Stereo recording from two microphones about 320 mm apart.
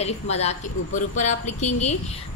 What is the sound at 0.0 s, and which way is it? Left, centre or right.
Speech, centre.